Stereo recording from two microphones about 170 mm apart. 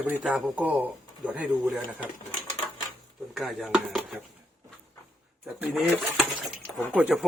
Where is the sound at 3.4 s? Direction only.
Centre (ahead or behind).